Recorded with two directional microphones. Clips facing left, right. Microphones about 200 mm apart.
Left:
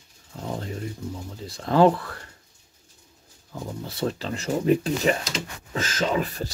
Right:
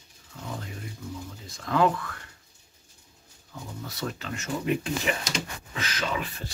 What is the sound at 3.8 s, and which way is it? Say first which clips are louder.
Speech: left 6 dB; 30° left (ahead or behind).